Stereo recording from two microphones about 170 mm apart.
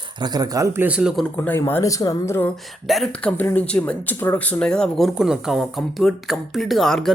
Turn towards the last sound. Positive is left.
turn(degrees=5)  # may be behind; listen again after turning